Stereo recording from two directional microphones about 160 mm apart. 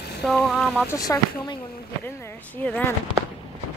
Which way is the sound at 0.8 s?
20° left (ahead or behind).